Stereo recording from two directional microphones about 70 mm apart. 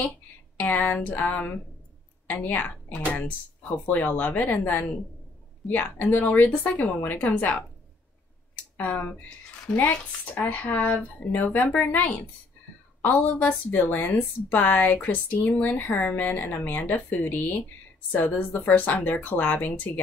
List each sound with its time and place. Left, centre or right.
0.0 s speech: left
2.2 s speech: left
8.7 s speech: left